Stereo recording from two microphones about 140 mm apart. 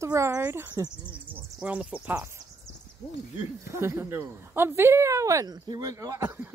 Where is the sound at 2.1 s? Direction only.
20° right (ahead or behind).